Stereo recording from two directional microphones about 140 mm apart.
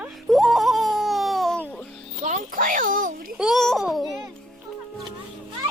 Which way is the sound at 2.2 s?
65° right (ahead or behind).